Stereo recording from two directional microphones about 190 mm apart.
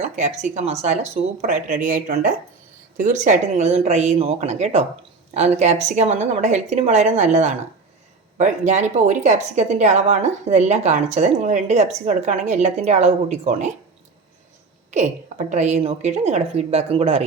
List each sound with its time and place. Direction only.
0.0 s a woman's voice: 40° right (ahead or behind)
14.8 s a woman's voice: 40° right (ahead or behind)